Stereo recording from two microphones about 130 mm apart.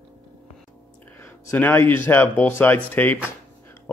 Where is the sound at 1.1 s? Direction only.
15° left (ahead or behind).